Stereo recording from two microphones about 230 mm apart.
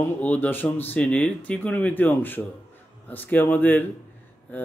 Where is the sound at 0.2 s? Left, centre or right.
Centre.